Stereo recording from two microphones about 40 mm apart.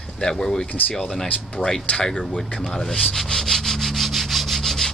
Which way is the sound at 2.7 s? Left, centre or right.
Centre.